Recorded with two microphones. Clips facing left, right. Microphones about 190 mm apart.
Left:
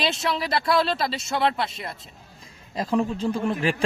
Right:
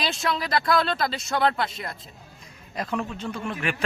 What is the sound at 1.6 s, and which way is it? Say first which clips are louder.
A man's voice: even; 25° left (ahead or behind).